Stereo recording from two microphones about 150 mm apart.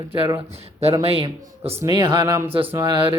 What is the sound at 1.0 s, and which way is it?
Speech, 40° right (ahead or behind).